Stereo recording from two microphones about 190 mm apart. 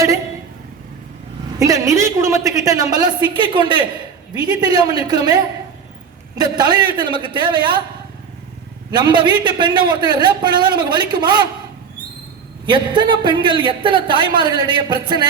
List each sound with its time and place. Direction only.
1.5 s a sound: 15° right (ahead or behind)
2.9 s a man's voice: 20° right (ahead or behind)
8.9 s a man's voice: 25° right (ahead or behind)
12.6 s a man's voice: 25° right (ahead or behind)